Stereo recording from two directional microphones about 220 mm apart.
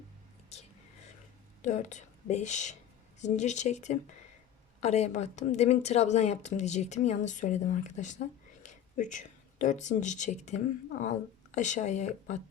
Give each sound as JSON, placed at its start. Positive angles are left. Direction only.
{"t": 1.6, "sound": "a woman's voice", "side_deg": 35}